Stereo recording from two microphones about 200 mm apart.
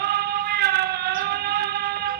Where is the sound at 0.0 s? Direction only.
55° right (ahead or behind).